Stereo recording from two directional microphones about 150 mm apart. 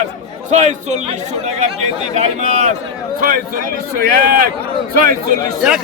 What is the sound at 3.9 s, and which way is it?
Speech, 75° right (ahead or behind).